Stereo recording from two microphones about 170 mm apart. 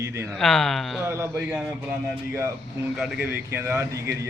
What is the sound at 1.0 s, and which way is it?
A man's voice, 15° right (ahead or behind).